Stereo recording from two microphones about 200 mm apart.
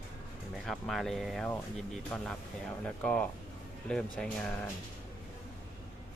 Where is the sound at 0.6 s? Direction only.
Centre (ahead or behind).